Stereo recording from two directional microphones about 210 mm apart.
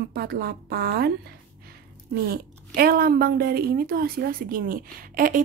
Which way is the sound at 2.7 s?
45° right (ahead or behind).